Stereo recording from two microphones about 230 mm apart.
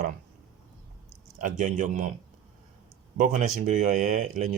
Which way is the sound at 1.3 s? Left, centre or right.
Right.